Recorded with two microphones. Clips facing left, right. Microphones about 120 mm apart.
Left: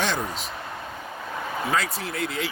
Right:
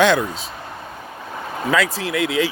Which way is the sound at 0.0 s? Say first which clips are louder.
Right 10 dB; 90° right.